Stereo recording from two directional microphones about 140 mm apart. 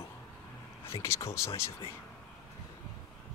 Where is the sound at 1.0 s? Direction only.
20° left (ahead or behind).